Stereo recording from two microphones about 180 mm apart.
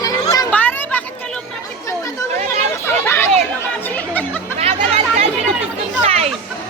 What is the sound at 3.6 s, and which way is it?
Chatter, 10° left (ahead or behind).